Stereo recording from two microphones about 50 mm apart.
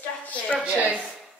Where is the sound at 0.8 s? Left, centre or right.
Right.